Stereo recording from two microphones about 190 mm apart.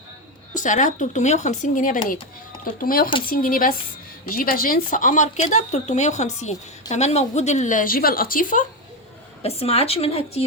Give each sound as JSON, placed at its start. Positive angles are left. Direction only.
{"t": 0.5, "sound": "a woman's voice", "side_deg": 40}
{"t": 9.4, "sound": "speech", "side_deg": 30}